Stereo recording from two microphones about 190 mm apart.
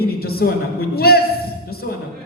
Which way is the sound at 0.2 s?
55° left (ahead or behind).